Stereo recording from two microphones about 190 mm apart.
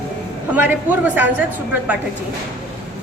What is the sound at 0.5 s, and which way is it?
Speech, 10° right (ahead or behind).